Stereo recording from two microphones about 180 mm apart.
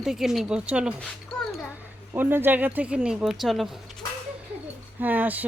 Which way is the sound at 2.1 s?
10° right (ahead or behind).